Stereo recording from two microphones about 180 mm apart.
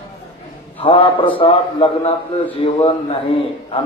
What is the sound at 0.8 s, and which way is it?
A man's voice, 30° left (ahead or behind).